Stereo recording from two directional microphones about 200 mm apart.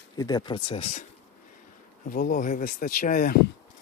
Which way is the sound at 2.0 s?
45° left (ahead or behind).